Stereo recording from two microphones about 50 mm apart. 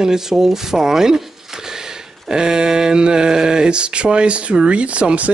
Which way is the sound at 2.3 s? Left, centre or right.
Centre.